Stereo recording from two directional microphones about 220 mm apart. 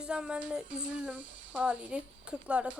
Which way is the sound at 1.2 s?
60° right (ahead or behind).